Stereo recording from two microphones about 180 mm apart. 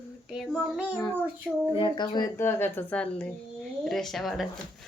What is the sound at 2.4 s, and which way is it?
A woman's voice, 10° left (ahead or behind).